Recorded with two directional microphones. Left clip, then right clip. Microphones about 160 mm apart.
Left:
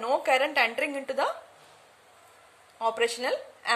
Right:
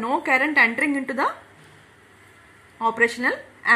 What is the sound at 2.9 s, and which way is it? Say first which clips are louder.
Speech: right 10 dB; 25° left (ahead or behind).